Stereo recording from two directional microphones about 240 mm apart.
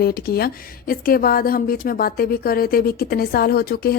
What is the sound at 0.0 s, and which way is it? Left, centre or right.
Speech, left.